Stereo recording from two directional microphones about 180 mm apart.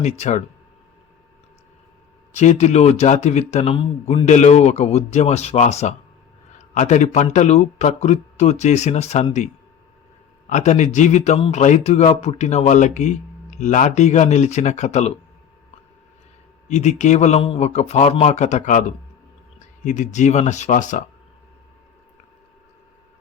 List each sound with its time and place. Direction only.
0.0 s speech: 40° left (ahead or behind)
2.3 s speech: 40° left (ahead or behind)
10.5 s speech: 40° left (ahead or behind)
16.6 s speech: 40° left (ahead or behind)